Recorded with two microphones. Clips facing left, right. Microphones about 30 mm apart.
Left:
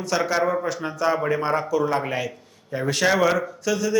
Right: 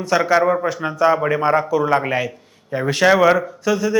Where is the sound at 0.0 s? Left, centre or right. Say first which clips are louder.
Right 6 dB; centre.